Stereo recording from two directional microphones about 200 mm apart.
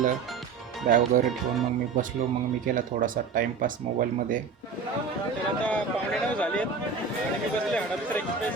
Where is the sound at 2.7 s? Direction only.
45° right (ahead or behind).